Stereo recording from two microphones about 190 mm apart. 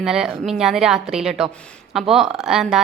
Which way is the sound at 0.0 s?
5° right (ahead or behind).